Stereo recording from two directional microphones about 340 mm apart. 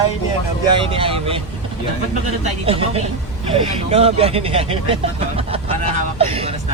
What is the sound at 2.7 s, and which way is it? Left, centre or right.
Speech, centre.